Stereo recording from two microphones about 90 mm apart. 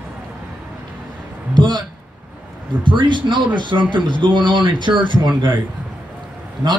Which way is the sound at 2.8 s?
60° right (ahead or behind).